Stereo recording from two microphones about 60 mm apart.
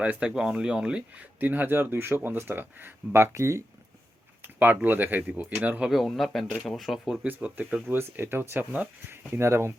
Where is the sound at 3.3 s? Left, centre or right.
Right.